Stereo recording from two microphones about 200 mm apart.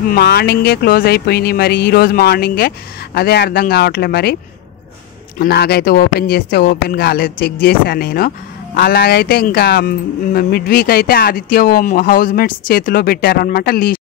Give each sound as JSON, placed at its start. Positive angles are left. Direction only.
{"t": 0.1, "sound": "speech", "side_deg": 50}
{"t": 5.4, "sound": "speech", "side_deg": 55}